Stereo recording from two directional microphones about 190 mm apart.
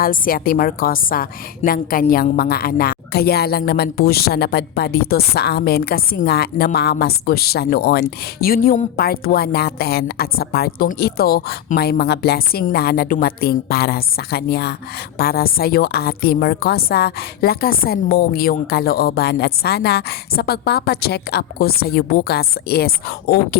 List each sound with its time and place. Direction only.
0.0 s a woman's voice: 50° left (ahead or behind)